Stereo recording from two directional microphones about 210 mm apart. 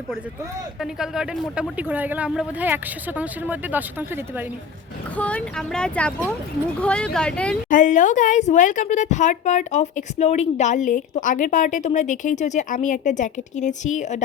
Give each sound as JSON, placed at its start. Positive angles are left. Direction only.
{"t": 0.8, "sound": "speech", "side_deg": 0}
{"t": 5.1, "sound": "speech", "side_deg": 5}
{"t": 7.7, "sound": "a woman's voice", "side_deg": 35}